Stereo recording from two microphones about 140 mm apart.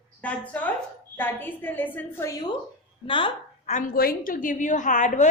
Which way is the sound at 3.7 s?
70° left (ahead or behind).